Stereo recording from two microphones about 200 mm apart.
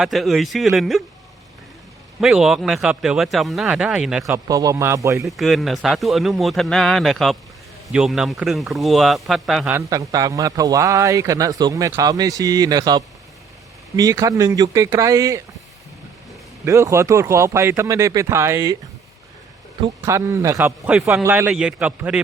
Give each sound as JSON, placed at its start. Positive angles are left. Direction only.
{"t": 0.0, "sound": "a man's voice", "side_deg": 0}
{"t": 2.2, "sound": "a man's voice", "side_deg": 0}
{"t": 4.3, "sound": "a man's voice", "side_deg": -15}
{"t": 5.2, "sound": "a man's voice", "side_deg": 0}
{"t": 9.7, "sound": "a man's voice", "side_deg": -15}
{"t": 16.6, "sound": "a man's voice", "side_deg": -15}
{"t": 19.8, "sound": "a man's voice", "side_deg": -15}